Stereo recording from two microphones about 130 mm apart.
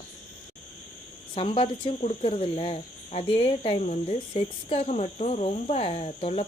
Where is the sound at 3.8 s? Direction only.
60° left (ahead or behind).